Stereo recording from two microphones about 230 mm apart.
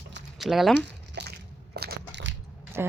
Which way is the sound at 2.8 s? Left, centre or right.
Centre.